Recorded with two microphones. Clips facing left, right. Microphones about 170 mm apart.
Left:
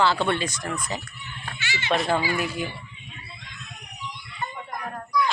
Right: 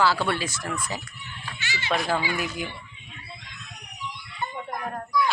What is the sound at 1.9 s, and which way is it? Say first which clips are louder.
Speech: left 2 dB; centre (ahead or behind).